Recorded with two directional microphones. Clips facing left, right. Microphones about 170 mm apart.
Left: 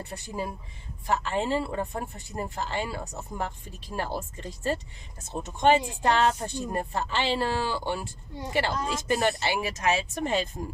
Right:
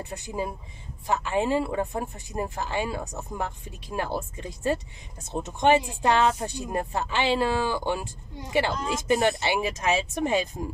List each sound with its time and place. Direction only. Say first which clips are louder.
0.0 s speech: right 2 dB; 15° right (ahead or behind)